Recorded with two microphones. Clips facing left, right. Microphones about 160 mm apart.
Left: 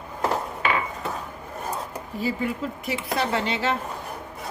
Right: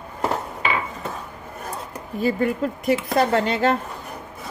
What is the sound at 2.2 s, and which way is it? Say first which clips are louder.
Speech: right 6 dB; 50° right (ahead or behind).